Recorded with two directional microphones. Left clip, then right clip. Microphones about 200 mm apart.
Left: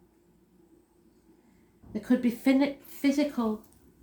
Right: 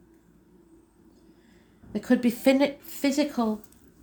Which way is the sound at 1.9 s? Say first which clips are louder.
Right 3 dB; 45° right (ahead or behind).